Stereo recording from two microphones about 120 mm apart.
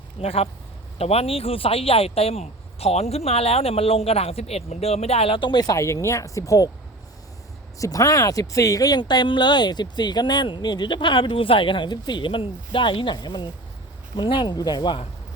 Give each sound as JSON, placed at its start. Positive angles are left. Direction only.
{"t": 0.2, "sound": "speech", "side_deg": 55}
{"t": 7.8, "sound": "speech", "side_deg": 30}